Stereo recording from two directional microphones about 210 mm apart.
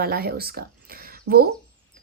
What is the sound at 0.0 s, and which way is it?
A woman's voice, 45° right (ahead or behind).